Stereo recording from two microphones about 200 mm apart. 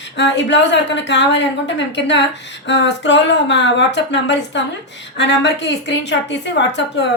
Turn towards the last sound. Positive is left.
turn(degrees=60)  # may be behind; listen again after turning